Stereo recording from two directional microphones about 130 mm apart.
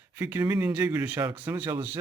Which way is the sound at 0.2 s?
15° right (ahead or behind).